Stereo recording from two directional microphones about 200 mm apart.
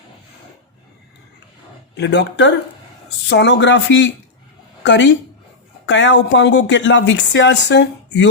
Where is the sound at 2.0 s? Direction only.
60° left (ahead or behind).